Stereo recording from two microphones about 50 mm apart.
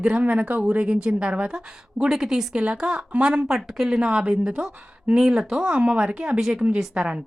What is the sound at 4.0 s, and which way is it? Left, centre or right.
Speech, right.